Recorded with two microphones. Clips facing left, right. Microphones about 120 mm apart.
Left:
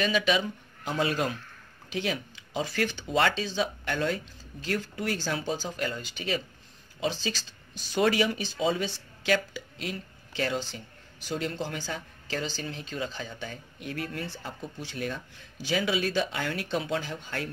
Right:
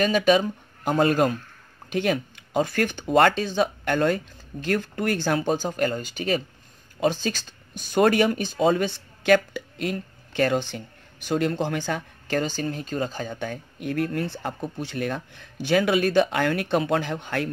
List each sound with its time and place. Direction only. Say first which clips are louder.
0.0 s speech: right 7 dB; 45° right (ahead or behind)